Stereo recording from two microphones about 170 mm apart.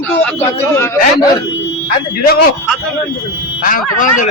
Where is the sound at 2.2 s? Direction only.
65° left (ahead or behind).